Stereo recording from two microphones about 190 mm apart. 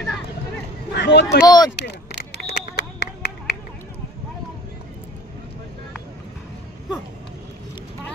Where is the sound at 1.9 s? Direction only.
60° left (ahead or behind).